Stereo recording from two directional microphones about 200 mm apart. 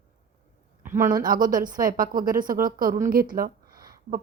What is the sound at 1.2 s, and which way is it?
A woman's voice, 45° right (ahead or behind).